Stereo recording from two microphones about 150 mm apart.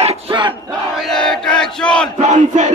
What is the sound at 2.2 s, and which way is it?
Battle cry, 50° right (ahead or behind).